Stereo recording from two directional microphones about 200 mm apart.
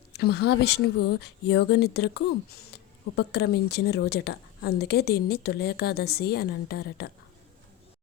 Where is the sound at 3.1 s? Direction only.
55° left (ahead or behind).